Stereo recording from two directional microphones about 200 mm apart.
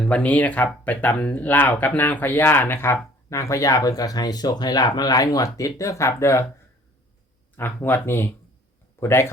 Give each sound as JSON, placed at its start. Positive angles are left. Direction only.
{"t": 0.0, "sound": "speech", "side_deg": 5}
{"t": 7.5, "sound": "speech", "side_deg": 10}